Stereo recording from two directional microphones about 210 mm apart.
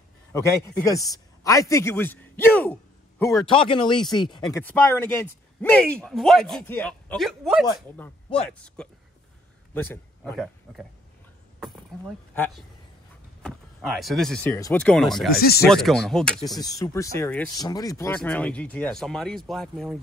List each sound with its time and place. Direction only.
0.8 s a man's voice: 15° left (ahead or behind)
3.4 s speech: 25° left (ahead or behind)
4.5 s a man's voice: 10° left (ahead or behind)
10.3 s speech: 5° right (ahead or behind)
13.4 s speech: centre (ahead or behind)
15.3 s speech: 45° left (ahead or behind)
15.7 s speech: centre (ahead or behind)
16.5 s speech: 15° left (ahead or behind); by 20.0 s centre (ahead or behind)